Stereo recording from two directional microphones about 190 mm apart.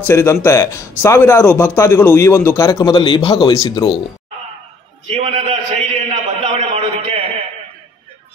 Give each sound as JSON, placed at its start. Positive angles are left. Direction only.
{"t": 0.0, "sound": "a man's voice", "side_deg": 15}
{"t": 5.1, "sound": "a man's voice", "side_deg": -30}
{"t": 6.5, "sound": "a sound", "side_deg": -30}